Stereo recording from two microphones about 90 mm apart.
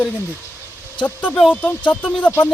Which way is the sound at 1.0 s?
15° left (ahead or behind).